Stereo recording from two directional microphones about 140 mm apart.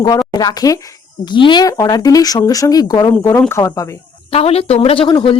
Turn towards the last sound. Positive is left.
turn(degrees=35)  # may be behind; listen again after turning